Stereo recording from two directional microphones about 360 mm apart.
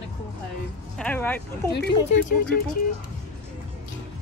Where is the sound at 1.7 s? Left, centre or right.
Left.